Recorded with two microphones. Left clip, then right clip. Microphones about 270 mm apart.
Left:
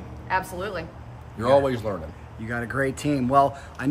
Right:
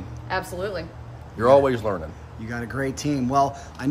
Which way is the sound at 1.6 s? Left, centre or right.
Centre.